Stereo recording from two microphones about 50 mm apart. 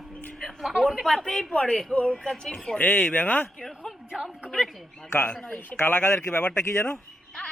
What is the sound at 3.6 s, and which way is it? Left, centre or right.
Speech, centre.